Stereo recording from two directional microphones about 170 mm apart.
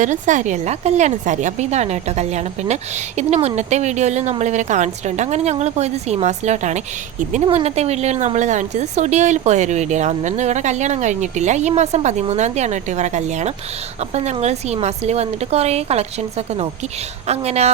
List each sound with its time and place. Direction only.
0.0 s a woman's voice: 45° right (ahead or behind)
17.2 s speech: 40° right (ahead or behind)